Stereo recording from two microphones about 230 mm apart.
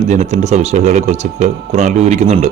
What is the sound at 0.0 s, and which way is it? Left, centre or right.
A man's voice, right.